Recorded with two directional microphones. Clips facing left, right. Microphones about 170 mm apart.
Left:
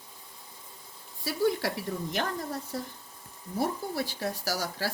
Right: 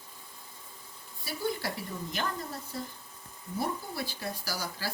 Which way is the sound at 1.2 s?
90° left.